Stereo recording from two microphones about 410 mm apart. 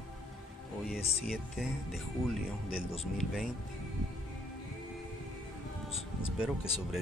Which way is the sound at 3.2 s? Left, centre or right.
Centre.